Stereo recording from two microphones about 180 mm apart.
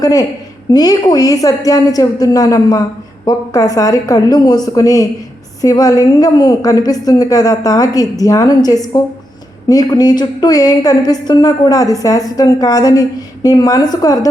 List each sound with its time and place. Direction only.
0.0 s a woman's voice: 20° left (ahead or behind)